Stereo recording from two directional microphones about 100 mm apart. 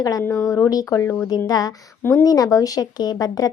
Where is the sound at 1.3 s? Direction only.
40° left (ahead or behind).